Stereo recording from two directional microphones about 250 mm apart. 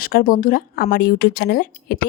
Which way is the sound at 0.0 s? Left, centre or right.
Left.